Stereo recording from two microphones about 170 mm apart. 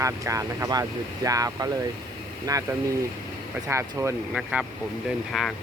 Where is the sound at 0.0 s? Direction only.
20° right (ahead or behind).